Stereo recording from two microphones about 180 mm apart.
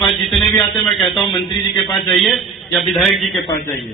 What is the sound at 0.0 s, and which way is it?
Music, centre (ahead or behind).